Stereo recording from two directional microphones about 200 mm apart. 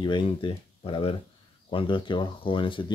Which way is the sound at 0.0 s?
25° left (ahead or behind).